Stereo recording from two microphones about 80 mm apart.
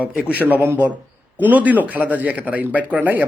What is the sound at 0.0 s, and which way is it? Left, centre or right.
Speech, centre.